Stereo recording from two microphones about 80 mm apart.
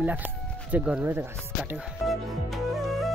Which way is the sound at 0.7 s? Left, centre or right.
Centre.